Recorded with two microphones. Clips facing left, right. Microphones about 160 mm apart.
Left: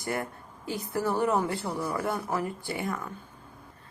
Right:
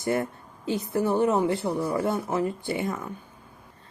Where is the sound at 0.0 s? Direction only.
20° right (ahead or behind).